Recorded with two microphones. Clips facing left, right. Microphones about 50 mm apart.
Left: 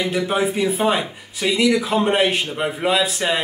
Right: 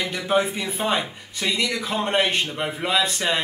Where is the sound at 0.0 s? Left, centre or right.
Centre.